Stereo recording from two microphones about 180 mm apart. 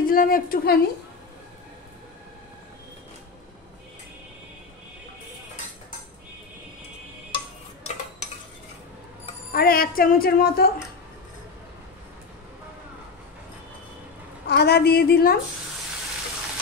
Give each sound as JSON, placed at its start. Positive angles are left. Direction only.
{"t": 0.0, "sound": "a woman's voice", "side_deg": 50}
{"t": 7.3, "sound": "dishes", "side_deg": 35}
{"t": 9.5, "sound": "speech", "side_deg": 55}
{"t": 14.5, "sound": "speech", "side_deg": 65}